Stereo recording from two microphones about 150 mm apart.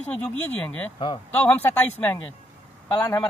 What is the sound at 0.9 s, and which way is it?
Speech, 30° left (ahead or behind).